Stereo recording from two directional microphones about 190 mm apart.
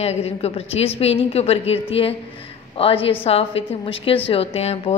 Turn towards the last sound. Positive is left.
turn(degrees=35)  # may be behind; listen again after turning